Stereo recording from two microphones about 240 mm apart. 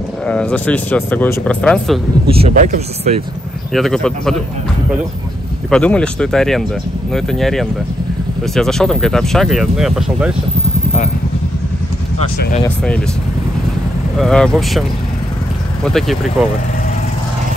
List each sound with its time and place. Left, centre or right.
0.3 s speech: centre
2.2 s speech: right
3.7 s speech: centre
5.7 s speech: centre
12.6 s speech: centre
14.1 s speech: centre